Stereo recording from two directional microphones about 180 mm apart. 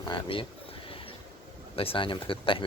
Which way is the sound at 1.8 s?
30° left (ahead or behind).